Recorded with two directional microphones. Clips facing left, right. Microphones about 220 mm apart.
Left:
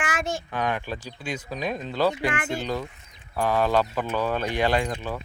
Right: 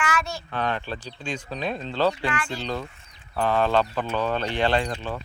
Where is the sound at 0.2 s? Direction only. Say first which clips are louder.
Left 2 dB; 50° left (ahead or behind).